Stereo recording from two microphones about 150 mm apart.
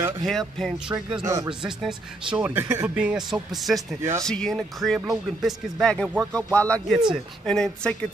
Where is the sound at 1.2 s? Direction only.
20° right (ahead or behind).